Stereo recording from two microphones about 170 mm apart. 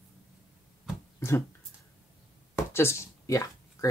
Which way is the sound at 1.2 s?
15° left (ahead or behind).